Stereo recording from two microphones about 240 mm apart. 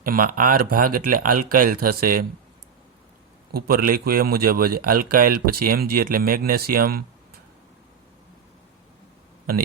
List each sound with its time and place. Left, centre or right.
0.0 s a man's voice: right
3.5 s a man's voice: right